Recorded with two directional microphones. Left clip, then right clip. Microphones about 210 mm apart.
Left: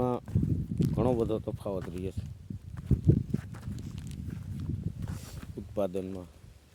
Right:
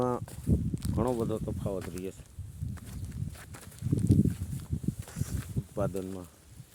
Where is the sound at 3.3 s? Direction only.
35° right (ahead or behind).